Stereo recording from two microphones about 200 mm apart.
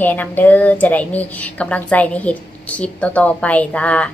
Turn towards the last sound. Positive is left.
turn(degrees=5)  # may be behind; listen again after turning